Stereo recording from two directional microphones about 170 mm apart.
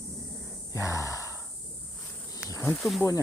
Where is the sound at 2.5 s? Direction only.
15° left (ahead or behind).